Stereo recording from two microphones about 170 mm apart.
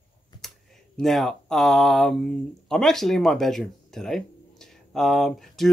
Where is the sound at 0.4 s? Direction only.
Centre (ahead or behind).